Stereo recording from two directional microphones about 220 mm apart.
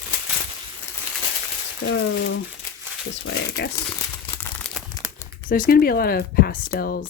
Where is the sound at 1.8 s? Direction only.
60° left (ahead or behind).